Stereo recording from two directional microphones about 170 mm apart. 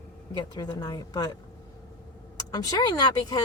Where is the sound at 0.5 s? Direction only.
25° left (ahead or behind).